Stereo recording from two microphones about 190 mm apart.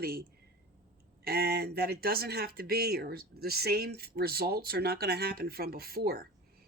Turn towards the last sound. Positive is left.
turn(degrees=-55)  # may be behind; listen again after turning